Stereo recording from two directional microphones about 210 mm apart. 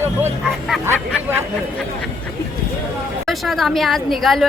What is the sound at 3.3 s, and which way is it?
Speech, centre (ahead or behind).